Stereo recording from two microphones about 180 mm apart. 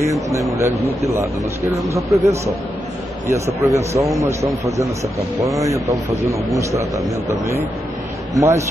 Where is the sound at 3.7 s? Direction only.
15° right (ahead or behind).